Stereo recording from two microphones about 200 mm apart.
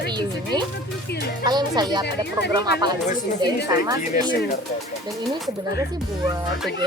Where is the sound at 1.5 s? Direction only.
20° right (ahead or behind).